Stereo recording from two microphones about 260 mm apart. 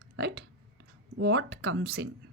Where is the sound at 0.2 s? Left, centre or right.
Right.